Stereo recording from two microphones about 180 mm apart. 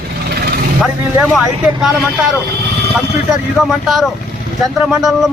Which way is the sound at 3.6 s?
Centre (ahead or behind).